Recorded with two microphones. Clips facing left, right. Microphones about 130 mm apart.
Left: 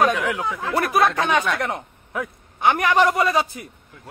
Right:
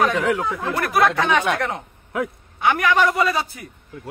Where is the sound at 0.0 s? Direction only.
25° left (ahead or behind).